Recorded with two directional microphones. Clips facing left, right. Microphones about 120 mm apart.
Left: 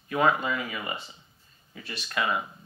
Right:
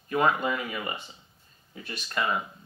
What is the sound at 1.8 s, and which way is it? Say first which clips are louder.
Speech: even; 45° right (ahead or behind).